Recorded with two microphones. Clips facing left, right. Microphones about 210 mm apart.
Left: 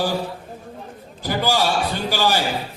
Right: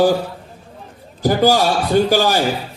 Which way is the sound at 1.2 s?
45° right (ahead or behind).